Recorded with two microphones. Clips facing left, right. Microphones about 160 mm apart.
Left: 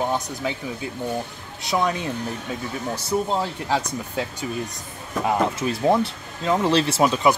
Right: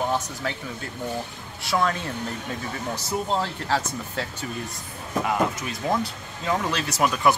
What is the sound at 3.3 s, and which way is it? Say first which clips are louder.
Speech: left 2 dB; 15° left (ahead or behind).